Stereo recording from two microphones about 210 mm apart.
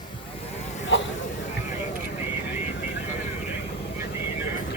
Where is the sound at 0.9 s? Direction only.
60° left (ahead or behind).